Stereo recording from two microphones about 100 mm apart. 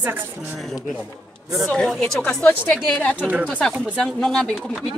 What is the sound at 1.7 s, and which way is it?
Speech, 5° left (ahead or behind).